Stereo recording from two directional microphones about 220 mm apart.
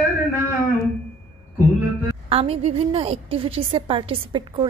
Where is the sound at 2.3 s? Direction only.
25° right (ahead or behind).